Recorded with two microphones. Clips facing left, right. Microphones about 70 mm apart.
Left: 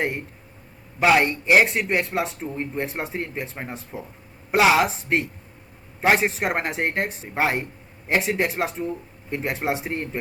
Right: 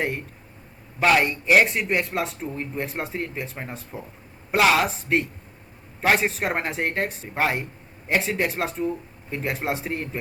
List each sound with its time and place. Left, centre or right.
0.9 s speech: centre